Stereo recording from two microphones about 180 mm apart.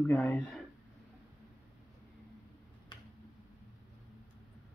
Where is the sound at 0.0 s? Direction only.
10° left (ahead or behind).